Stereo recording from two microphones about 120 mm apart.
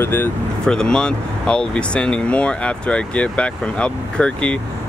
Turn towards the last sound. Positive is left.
turn(degrees=10)  # may be behind; listen again after turning